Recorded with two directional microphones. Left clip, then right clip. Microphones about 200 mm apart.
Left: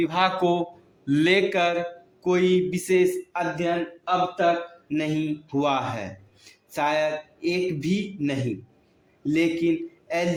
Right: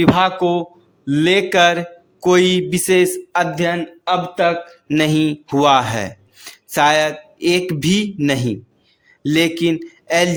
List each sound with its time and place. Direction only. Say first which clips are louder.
0.1 s a man's voice: right 7 dB; 25° right (ahead or behind); by 10.2 s 40° right (ahead or behind)